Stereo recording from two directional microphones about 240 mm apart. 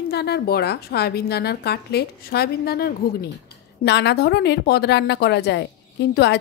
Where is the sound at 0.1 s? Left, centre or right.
Left.